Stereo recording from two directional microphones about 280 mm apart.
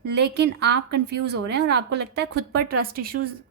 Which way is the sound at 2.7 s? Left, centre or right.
Right.